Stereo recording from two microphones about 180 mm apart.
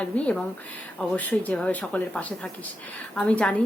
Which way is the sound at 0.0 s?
5° left (ahead or behind).